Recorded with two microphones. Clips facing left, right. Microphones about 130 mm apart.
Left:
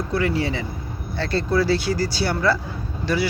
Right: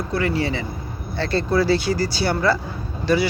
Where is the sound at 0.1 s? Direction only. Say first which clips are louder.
Right 1 dB; 10° left (ahead or behind).